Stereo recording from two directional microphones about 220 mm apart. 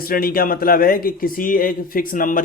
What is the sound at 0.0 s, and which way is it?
A man's voice, 40° left (ahead or behind).